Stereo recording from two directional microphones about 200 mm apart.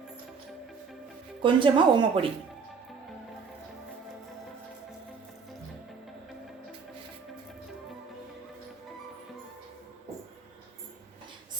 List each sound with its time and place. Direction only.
1.4 s speech: 25° right (ahead or behind)